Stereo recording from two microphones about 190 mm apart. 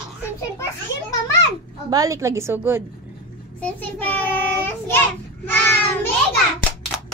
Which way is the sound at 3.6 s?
10° left (ahead or behind).